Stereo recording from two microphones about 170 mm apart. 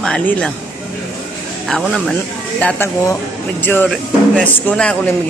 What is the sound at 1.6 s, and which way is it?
Speech, centre (ahead or behind).